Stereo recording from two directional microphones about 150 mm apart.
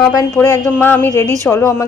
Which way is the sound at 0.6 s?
15° left (ahead or behind).